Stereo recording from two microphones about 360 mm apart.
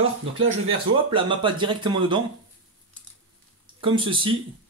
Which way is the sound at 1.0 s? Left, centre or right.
Centre.